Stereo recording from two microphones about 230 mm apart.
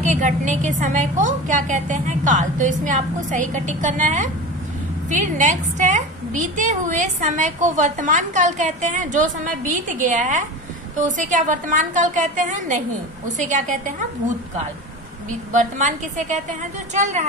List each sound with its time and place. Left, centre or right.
0.1 s a woman's voice: right
15.5 s a woman's voice: right